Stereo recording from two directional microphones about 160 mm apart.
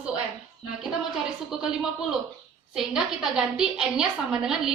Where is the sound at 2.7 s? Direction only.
5° right (ahead or behind).